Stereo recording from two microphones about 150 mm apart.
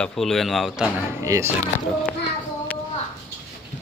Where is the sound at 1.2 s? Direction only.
20° right (ahead or behind).